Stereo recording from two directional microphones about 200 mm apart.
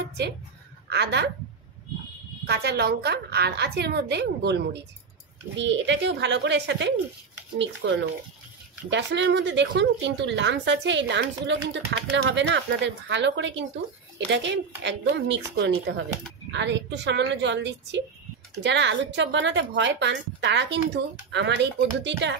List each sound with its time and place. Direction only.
0.2 s a woman's voice: 60° right (ahead or behind)
2.4 s a woman's voice: 55° right (ahead or behind)